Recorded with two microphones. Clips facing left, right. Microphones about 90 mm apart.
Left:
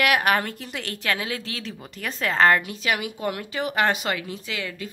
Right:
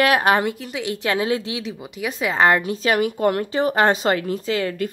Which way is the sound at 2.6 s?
35° right (ahead or behind).